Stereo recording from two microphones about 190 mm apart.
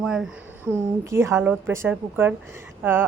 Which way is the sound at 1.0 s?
15° right (ahead or behind).